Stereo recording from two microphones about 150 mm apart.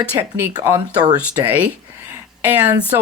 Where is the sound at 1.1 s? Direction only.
10° right (ahead or behind).